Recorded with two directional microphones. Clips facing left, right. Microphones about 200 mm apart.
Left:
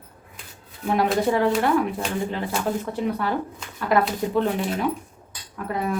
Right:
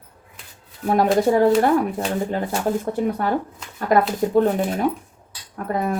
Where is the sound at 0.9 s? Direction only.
45° right (ahead or behind).